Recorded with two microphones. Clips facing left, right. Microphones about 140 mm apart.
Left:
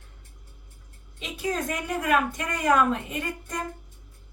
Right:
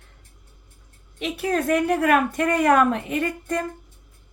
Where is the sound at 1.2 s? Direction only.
65° right (ahead or behind).